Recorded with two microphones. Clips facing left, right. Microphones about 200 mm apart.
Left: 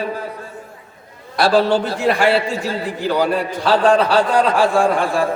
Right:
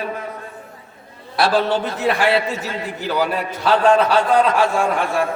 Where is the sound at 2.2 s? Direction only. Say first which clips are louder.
Left 2 dB; 30° left (ahead or behind).